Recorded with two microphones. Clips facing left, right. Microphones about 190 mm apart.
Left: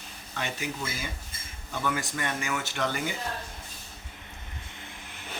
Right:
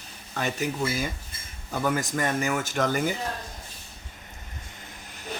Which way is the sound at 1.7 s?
40° right (ahead or behind).